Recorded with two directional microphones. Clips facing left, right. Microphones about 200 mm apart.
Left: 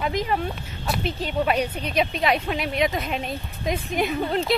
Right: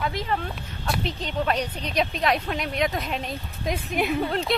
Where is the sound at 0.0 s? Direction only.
15° left (ahead or behind).